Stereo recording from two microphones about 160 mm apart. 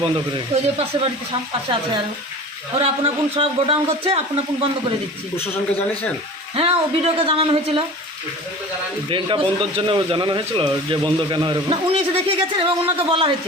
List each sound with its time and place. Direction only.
0.0 s speech: 35° right (ahead or behind)
2.7 s speech: 35° right (ahead or behind)
6.6 s speech: 35° right (ahead or behind)
9.0 s speech: 30° right (ahead or behind)